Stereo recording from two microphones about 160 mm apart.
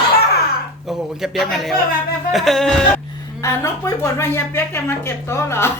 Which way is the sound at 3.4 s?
20° left (ahead or behind).